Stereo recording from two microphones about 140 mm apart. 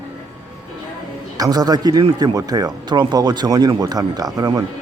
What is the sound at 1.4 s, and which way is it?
Speech, 30° right (ahead or behind).